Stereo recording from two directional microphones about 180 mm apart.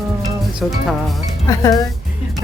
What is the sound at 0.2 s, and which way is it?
Music, centre (ahead or behind).